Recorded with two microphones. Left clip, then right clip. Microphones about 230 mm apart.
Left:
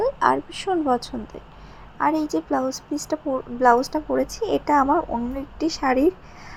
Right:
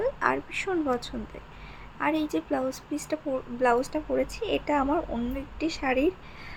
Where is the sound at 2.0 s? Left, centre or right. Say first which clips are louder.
Left 6 dB; centre.